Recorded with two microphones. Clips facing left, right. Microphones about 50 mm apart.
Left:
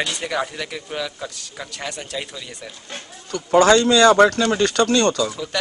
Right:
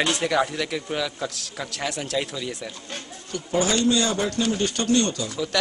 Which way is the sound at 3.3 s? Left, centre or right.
Left.